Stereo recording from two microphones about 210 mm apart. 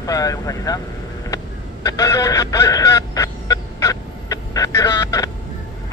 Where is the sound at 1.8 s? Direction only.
15° left (ahead or behind).